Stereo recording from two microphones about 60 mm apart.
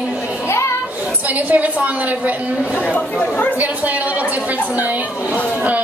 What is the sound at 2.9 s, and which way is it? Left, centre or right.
Speech, left.